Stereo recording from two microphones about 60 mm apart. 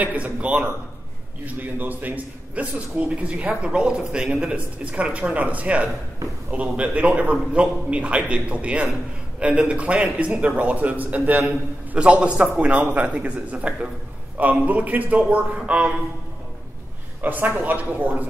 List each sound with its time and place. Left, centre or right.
0.0 s a man's voice: right
17.2 s a man's voice: right